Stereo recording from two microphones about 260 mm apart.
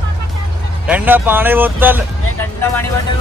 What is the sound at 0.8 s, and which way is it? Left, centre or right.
Speech, centre.